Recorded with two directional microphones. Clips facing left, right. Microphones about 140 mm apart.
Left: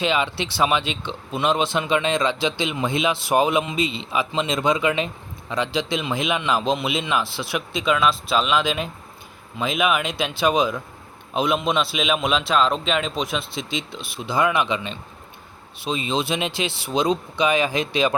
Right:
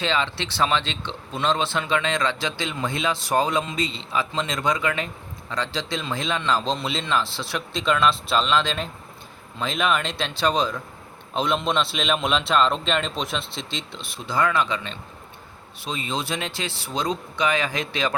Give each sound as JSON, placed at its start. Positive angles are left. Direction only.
{"t": 0.0, "sound": "a man's voice", "side_deg": 15}
{"t": 14.2, "sound": "speech", "side_deg": 20}